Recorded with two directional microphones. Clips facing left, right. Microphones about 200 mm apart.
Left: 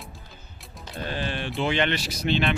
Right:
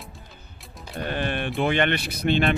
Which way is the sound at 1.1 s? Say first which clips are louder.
Right 3 dB; 55° right (ahead or behind).